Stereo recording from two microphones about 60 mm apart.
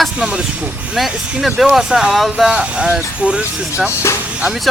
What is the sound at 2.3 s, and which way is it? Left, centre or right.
Speech, centre.